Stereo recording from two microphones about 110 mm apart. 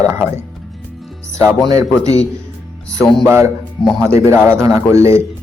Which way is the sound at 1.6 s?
30° right (ahead or behind).